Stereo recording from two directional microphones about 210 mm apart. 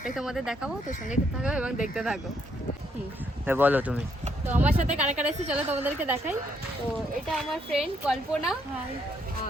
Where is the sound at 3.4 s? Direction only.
10° right (ahead or behind).